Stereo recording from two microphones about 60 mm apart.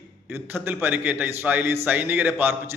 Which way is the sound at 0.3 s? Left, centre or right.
Right.